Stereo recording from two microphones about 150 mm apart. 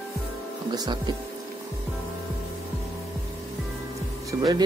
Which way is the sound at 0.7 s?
30° right (ahead or behind).